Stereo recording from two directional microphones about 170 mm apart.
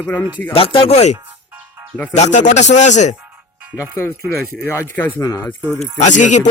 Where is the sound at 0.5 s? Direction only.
30° left (ahead or behind).